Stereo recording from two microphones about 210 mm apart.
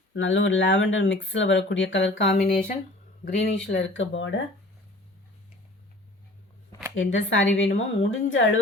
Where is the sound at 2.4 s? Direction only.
40° left (ahead or behind).